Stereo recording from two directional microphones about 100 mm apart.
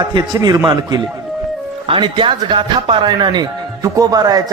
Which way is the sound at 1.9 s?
55° right (ahead or behind).